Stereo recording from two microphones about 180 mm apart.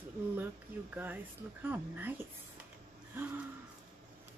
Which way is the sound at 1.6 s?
10° right (ahead or behind).